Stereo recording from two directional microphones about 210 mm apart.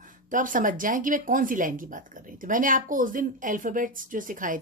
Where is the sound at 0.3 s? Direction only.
40° right (ahead or behind).